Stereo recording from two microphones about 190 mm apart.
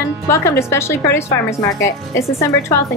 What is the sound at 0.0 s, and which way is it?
A woman's voice, 15° left (ahead or behind).